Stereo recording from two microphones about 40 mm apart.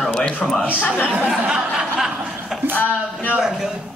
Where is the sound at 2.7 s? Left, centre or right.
Left.